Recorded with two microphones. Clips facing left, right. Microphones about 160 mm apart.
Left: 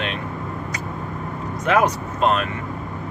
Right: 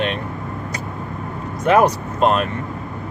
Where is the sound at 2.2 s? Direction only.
45° right (ahead or behind).